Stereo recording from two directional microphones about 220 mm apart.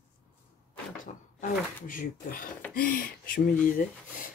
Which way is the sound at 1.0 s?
35° left (ahead or behind).